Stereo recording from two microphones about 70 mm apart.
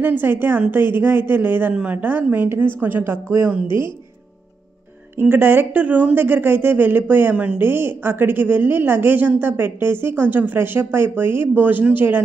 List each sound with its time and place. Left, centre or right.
0.0 s a woman's voice: right
5.2 s a woman's voice: right
7.6 s a woman's voice: right